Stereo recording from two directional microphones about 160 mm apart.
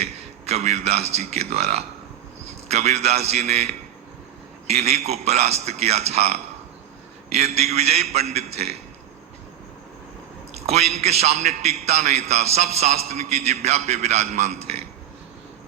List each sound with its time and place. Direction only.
0.0 s a man's voice: 40° right (ahead or behind)
10.5 s a man's voice: 40° right (ahead or behind)